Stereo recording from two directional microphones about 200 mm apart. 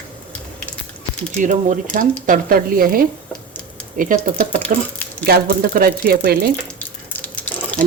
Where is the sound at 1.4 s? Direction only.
40° right (ahead or behind).